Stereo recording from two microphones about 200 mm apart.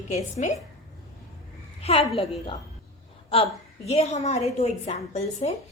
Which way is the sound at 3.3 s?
30° left (ahead or behind).